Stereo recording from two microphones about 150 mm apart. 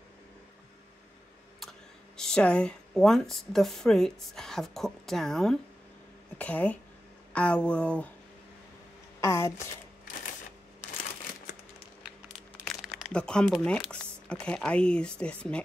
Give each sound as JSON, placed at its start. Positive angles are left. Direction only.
{"t": 1.6, "sound": "speech", "side_deg": 5}
{"t": 9.2, "sound": "speech", "side_deg": 20}
{"t": 12.3, "sound": "speech", "side_deg": 0}